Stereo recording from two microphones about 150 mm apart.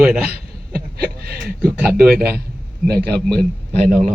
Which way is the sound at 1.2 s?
90° right.